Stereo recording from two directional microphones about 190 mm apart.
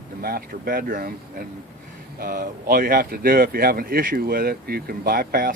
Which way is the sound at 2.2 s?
50° right (ahead or behind).